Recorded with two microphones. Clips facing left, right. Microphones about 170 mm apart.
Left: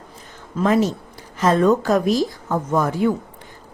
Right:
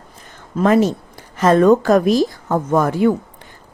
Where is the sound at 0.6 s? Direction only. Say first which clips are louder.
Right 4 dB; 60° right (ahead or behind).